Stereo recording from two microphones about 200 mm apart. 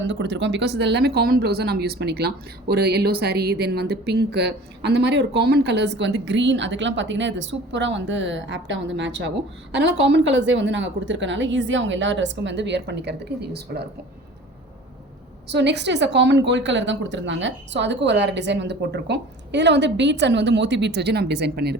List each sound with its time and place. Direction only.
0.0 s a woman's voice: 65° right (ahead or behind)
15.4 s speech: 60° right (ahead or behind)